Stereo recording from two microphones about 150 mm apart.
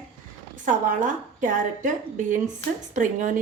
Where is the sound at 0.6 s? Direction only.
60° right (ahead or behind).